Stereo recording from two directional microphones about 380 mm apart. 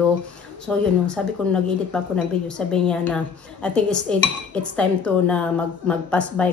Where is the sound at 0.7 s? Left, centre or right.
Centre.